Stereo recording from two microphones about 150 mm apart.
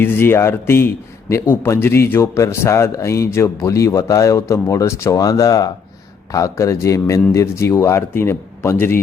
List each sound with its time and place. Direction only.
0.0 s a man's voice: 15° left (ahead or behind)